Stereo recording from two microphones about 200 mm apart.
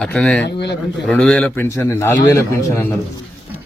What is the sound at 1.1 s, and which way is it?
A man's voice, 5° left (ahead or behind).